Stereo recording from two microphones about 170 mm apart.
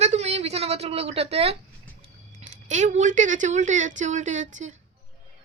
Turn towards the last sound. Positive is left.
turn(degrees=-45)  # may be behind; listen again after turning